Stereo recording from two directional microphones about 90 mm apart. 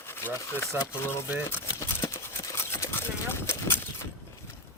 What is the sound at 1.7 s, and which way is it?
Clip-clop, 35° left (ahead or behind).